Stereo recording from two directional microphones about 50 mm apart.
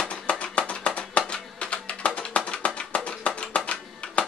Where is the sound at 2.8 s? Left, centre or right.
Left.